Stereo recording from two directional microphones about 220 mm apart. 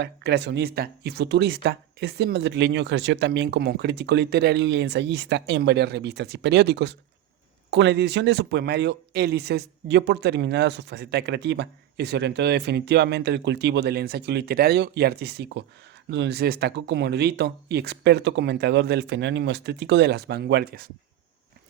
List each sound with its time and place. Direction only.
0.0 s speech: 50° right (ahead or behind)